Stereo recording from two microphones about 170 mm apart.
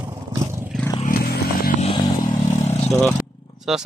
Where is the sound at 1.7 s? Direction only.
35° left (ahead or behind).